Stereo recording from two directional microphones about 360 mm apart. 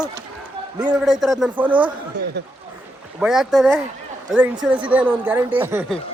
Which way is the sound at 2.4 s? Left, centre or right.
Right.